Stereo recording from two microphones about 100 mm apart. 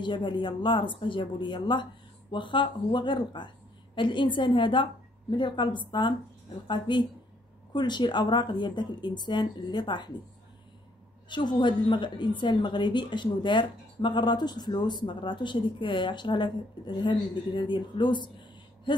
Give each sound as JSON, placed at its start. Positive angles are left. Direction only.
{"t": 0.0, "sound": "a woman's voice", "side_deg": 55}
{"t": 11.2, "sound": "a woman's voice", "side_deg": 50}
{"t": 18.9, "sound": "a sound", "side_deg": 55}